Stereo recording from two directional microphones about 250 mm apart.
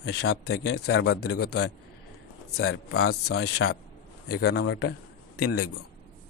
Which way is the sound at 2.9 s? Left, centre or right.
Left.